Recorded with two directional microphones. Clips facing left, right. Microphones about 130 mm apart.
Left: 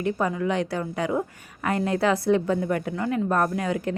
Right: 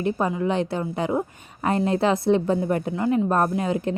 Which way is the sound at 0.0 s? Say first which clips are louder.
Right 2 dB; 25° right (ahead or behind).